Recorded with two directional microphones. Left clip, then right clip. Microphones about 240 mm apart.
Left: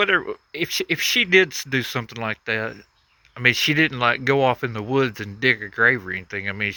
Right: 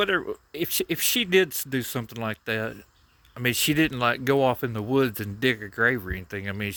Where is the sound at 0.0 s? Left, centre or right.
Centre.